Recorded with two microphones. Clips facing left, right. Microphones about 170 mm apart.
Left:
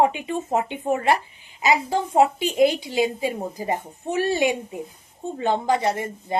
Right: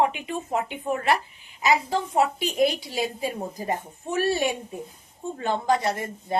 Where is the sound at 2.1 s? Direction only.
20° left (ahead or behind).